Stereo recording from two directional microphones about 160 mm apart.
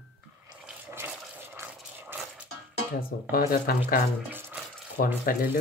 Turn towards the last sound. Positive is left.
turn(degrees=65)  # may be behind; listen again after turning